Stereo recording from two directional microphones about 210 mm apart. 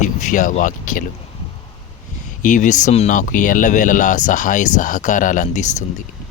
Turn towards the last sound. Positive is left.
turn(degrees=40)  # may be behind; listen again after turning